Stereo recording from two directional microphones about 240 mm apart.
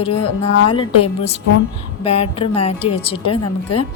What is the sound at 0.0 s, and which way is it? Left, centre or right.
A woman's voice, left.